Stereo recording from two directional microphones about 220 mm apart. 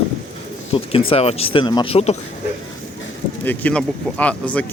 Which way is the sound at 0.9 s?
25° left (ahead or behind).